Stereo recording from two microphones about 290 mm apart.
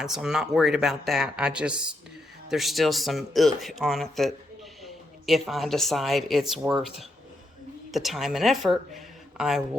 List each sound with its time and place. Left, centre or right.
0.0 s speech: centre
7.9 s speech: centre
8.9 s a sound: centre